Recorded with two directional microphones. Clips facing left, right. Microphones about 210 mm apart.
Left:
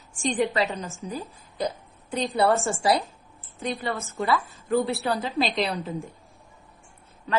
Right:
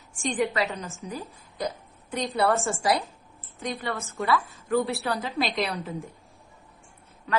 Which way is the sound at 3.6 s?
30° left (ahead or behind).